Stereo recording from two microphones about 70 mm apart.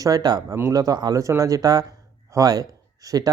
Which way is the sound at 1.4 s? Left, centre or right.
Right.